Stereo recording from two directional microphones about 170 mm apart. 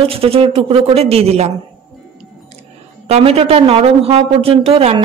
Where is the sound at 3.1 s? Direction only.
35° right (ahead or behind).